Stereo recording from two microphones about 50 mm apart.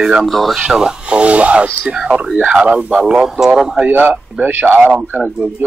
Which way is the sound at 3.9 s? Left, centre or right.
Right.